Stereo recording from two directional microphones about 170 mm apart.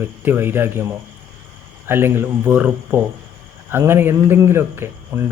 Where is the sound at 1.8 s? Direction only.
15° right (ahead or behind).